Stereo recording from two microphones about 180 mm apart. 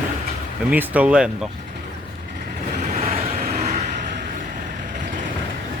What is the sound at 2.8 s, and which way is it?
Vehicle, 45° right (ahead or behind).